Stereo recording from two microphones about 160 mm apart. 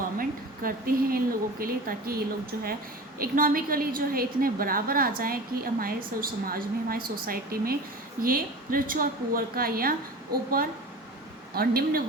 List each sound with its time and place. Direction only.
0.2 s a woman's voice: 65° right (ahead or behind)
11.5 s speech: 70° right (ahead or behind)